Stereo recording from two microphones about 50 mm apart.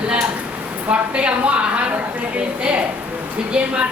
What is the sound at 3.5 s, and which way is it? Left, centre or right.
Speech, right.